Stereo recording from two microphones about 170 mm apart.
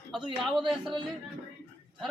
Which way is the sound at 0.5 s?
Centre (ahead or behind).